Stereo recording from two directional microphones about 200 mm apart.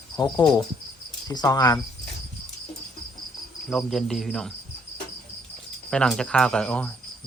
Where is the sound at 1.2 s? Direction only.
20° left (ahead or behind).